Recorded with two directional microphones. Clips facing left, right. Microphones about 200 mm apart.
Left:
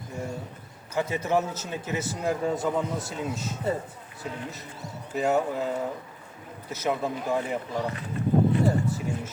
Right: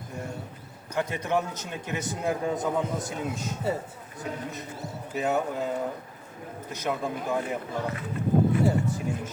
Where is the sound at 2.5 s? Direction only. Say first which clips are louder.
Even; 20° right (ahead or behind).